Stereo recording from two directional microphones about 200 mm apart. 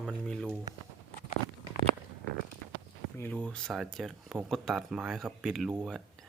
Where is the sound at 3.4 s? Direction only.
5° left (ahead or behind).